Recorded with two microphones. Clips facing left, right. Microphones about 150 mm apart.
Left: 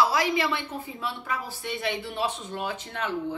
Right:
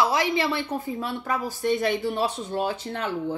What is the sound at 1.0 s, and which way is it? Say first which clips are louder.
Speech: right 4 dB; 45° right (ahead or behind).